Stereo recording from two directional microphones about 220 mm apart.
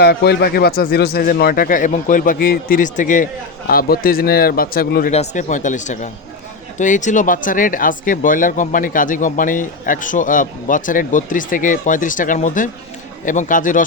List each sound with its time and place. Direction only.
0.0 s a man's voice: 45° left (ahead or behind)
5.1 s speech: 30° left (ahead or behind)